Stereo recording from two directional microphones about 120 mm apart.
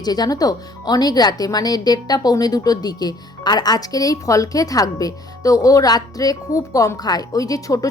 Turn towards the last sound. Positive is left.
turn(degrees=30)  # may be behind; listen again after turning